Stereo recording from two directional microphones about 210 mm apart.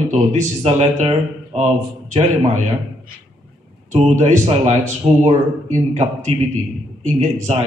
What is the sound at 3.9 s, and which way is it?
A man's voice, 35° right (ahead or behind).